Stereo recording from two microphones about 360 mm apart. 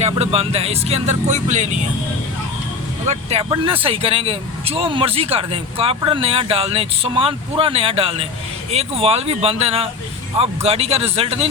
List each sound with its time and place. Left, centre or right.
0.0 s speech: centre
3.1 s speech: centre